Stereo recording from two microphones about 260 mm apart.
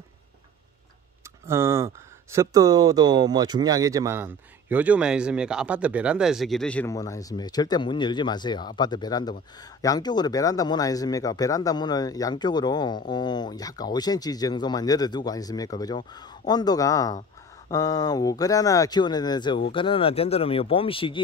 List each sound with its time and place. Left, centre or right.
1.5 s speech: centre